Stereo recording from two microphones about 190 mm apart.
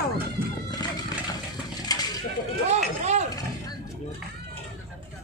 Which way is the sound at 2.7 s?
35° right (ahead or behind).